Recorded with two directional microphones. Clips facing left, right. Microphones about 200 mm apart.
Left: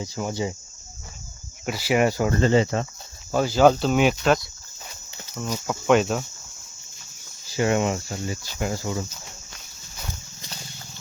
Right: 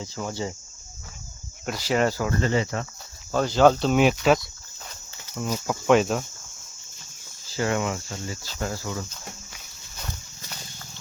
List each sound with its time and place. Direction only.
0.0 s speech: 15° left (ahead or behind)
1.6 s speech: 5° left (ahead or behind)
2.2 s cricket: 25° left (ahead or behind)
3.3 s speech: 5° left (ahead or behind)
7.5 s cricket: 20° left (ahead or behind)